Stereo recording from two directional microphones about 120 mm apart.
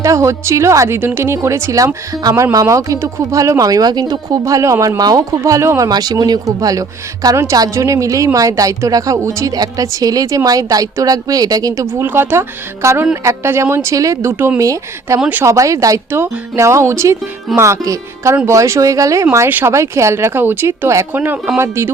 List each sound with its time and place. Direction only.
0.0 s a woman's voice: 25° right (ahead or behind)
15.2 s speech: 15° right (ahead or behind)
15.5 s a woman's voice: 25° right (ahead or behind)
21.2 s speech: 10° right (ahead or behind)
21.6 s a woman's voice: 20° right (ahead or behind)